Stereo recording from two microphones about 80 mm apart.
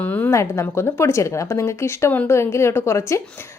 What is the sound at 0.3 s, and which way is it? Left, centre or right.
A woman's voice, left.